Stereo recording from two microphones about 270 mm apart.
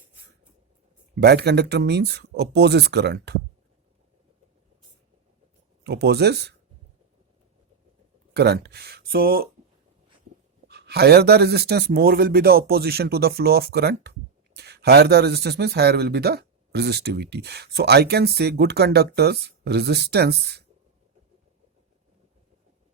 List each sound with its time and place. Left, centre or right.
1.2 s speech: right
5.8 s speech: right
8.3 s speech: right
10.7 s speech: right